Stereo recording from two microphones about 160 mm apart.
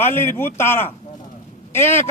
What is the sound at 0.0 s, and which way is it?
Speech, 15° left (ahead or behind).